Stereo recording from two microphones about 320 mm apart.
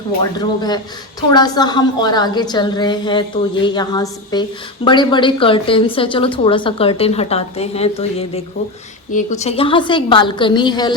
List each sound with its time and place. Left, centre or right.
0.3 s a woman's voice: centre